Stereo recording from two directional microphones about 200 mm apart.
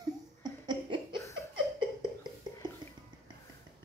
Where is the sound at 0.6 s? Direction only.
25° right (ahead or behind).